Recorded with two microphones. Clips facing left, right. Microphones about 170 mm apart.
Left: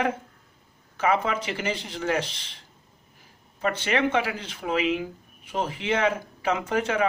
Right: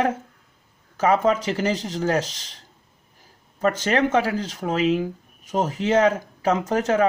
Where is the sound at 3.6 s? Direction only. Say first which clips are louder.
Right 4 dB; 40° right (ahead or behind).